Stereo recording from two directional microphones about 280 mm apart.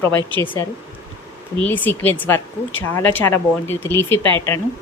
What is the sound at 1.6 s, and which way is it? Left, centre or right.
Speech, centre.